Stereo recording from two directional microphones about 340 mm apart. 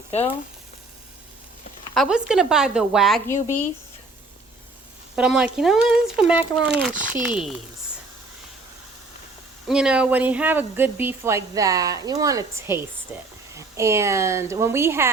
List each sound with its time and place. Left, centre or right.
0.1 s speech: centre
1.9 s a woman's voice: centre
5.1 s a woman's voice: centre
9.6 s speech: centre